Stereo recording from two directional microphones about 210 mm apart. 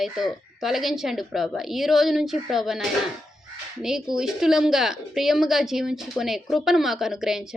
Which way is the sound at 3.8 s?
Centre (ahead or behind).